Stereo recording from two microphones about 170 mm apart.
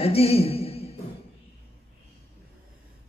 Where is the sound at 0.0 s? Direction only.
35° left (ahead or behind).